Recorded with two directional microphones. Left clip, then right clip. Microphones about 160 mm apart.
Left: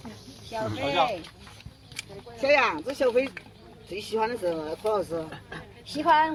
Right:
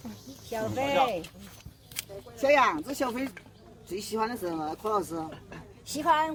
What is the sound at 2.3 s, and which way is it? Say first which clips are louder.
Speech: left 1 dB; 45° right (ahead or behind).